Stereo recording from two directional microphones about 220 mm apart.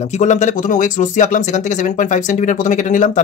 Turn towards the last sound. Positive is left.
turn(degrees=35)  # may be behind; listen again after turning